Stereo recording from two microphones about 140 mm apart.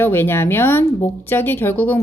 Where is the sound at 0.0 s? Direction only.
15° left (ahead or behind).